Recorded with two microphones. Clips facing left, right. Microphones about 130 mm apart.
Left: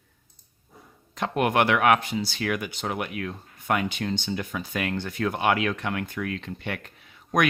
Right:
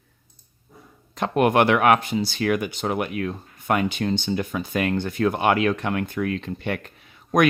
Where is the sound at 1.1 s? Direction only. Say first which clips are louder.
Right 4 dB; 40° right (ahead or behind).